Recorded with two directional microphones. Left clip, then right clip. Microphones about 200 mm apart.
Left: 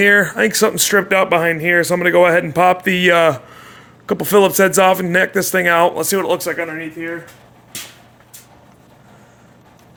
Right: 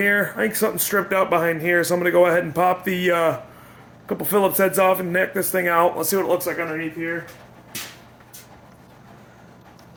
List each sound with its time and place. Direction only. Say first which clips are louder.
0.0 s speech: left 7 dB; 60° left (ahead or behind)
4.0 s speech: left 7 dB; 65° left (ahead or behind)